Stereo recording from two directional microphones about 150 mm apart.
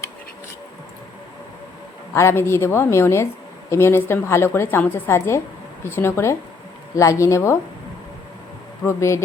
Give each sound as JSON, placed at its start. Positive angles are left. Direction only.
{"t": 2.1, "sound": "a woman's voice", "side_deg": 15}
{"t": 8.8, "sound": "speech", "side_deg": 20}